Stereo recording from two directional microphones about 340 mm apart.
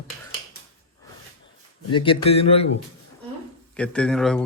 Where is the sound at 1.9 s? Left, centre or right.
Centre.